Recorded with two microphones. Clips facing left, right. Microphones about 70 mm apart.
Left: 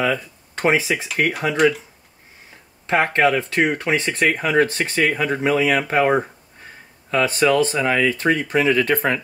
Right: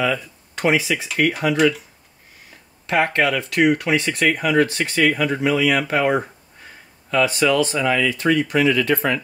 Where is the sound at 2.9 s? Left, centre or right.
Left.